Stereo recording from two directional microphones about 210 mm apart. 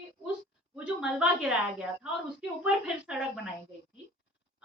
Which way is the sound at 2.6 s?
5° right (ahead or behind).